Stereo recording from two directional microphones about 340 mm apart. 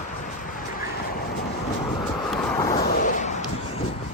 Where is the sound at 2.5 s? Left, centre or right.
Centre.